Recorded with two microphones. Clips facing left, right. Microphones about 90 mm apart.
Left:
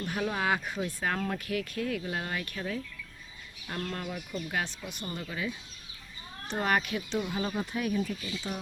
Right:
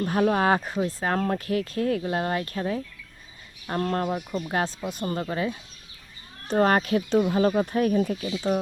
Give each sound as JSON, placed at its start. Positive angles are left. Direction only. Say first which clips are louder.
{"t": 0.0, "sound": "speech", "louder": "right 9 dB", "side_deg": -50}
{"t": 3.7, "sound": "speech", "louder": "right 10 dB", "side_deg": -45}
{"t": 5.0, "sound": "speech", "louder": "right 8 dB", "side_deg": -50}